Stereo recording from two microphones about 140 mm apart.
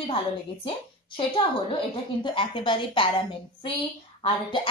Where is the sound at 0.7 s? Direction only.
40° left (ahead or behind).